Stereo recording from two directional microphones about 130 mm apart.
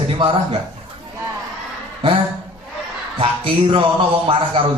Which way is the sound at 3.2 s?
45° right (ahead or behind).